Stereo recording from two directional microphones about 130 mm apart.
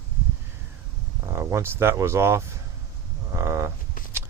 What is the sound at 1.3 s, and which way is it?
Speech, 20° right (ahead or behind).